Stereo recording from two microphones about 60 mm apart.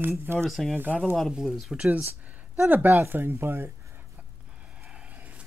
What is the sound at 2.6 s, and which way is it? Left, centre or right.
Speech, right.